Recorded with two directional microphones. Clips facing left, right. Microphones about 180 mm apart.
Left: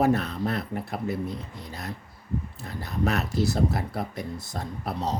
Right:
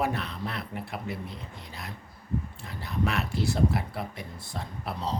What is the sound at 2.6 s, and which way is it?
Speech, 40° left (ahead or behind).